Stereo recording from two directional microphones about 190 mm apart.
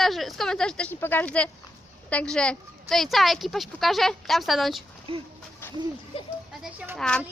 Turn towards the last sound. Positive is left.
turn(degrees=5)  # may be behind; listen again after turning